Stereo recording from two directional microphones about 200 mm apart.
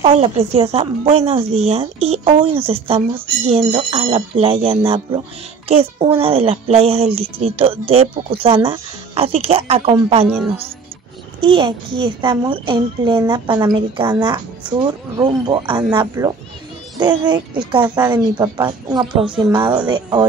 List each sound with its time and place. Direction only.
0.0 s a woman's voice: 30° right (ahead or behind)
11.4 s a woman's voice: 25° right (ahead or behind)